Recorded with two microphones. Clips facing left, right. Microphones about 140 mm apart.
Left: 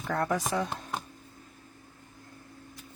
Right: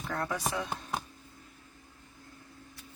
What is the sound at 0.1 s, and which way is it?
Speech, 45° left (ahead or behind).